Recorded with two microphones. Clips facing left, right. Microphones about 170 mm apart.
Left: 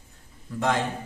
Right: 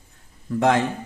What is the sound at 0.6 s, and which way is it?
Speech, 60° right (ahead or behind).